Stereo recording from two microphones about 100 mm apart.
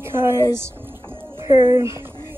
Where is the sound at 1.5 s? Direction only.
30° right (ahead or behind).